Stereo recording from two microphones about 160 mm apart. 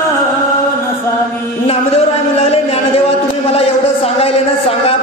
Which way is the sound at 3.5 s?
40° left (ahead or behind).